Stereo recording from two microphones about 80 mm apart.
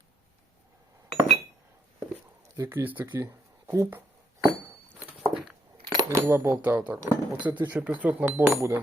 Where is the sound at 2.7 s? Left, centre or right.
Right.